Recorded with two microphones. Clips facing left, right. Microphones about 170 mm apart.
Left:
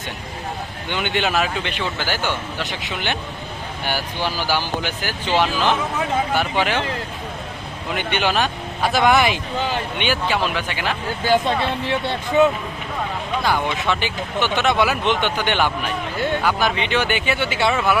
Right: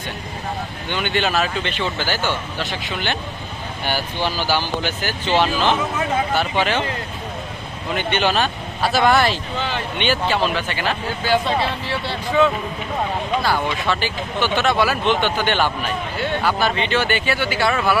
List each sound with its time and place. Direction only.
0.9 s speech: 15° left (ahead or behind)
7.9 s speech: 10° left (ahead or behind)
13.4 s speech: 15° left (ahead or behind)